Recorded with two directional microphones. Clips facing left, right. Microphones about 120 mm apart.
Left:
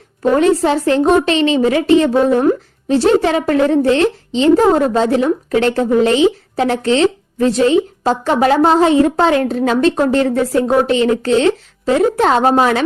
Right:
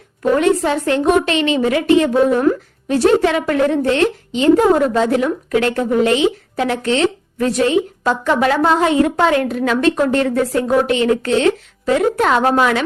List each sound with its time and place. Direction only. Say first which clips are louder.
0.2 s a woman's voice: left 2 dB; 35° left (ahead or behind)